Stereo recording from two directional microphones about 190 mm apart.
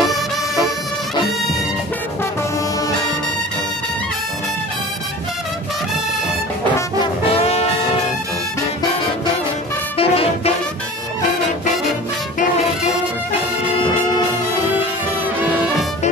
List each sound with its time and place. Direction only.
7.0 s music: 30° left (ahead or behind)
9.9 s music: 30° left (ahead or behind)